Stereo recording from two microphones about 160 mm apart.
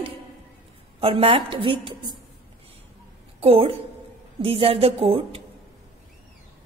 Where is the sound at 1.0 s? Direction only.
35° right (ahead or behind).